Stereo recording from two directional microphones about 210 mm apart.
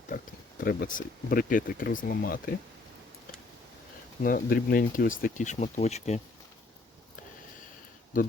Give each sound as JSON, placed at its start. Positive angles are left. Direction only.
{"t": 0.6, "sound": "speech", "side_deg": 45}
{"t": 4.2, "sound": "speech", "side_deg": 45}